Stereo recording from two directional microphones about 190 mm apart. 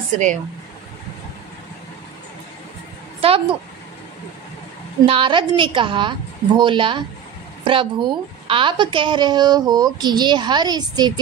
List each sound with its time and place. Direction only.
3.2 s a woman's voice: 30° right (ahead or behind)
5.0 s a woman's voice: 25° right (ahead or behind)